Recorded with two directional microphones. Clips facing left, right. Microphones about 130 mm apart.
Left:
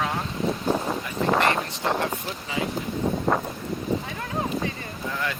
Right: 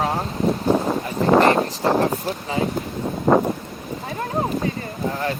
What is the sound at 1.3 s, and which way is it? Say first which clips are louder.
Speech: right 8 dB; 35° right (ahead or behind).